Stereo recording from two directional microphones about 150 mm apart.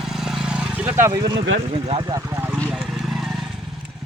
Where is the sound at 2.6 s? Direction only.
5° right (ahead or behind).